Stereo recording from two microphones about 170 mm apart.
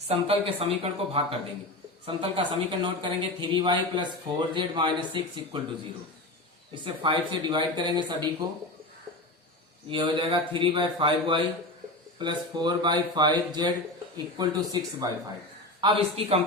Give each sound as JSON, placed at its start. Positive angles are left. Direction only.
{"t": 0.1, "sound": "speech", "side_deg": -35}
{"t": 6.8, "sound": "speech", "side_deg": -25}
{"t": 9.9, "sound": "speech", "side_deg": -30}